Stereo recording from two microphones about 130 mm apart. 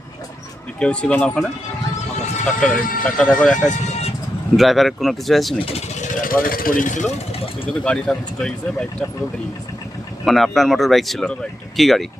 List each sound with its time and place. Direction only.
0.8 s speech: 10° left (ahead or behind)
2.6 s speech: 90° left
3.0 s speech: 5° left (ahead or behind)
6.0 s speech: 90° left
7.9 s speech: 5° left (ahead or behind)
10.2 s speech: centre (ahead or behind)